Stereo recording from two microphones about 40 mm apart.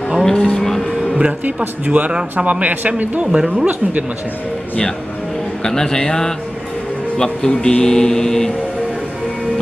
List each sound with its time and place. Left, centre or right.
0.2 s vehicle: centre
1.9 s a man's voice: right
3.3 s speech: centre
5.6 s speech: centre